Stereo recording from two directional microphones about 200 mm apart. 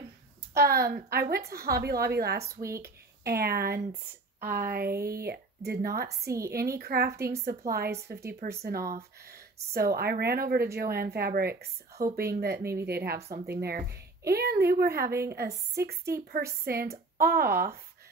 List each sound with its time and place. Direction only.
0.6 s speech: 50° right (ahead or behind)
2.6 s speech: 15° right (ahead or behind)
3.3 s speech: 50° right (ahead or behind)
6.2 s speech: 15° right (ahead or behind)
6.5 s speech: 50° right (ahead or behind)
7.6 s speech: 15° right (ahead or behind)
8.3 s speech: 50° right (ahead or behind)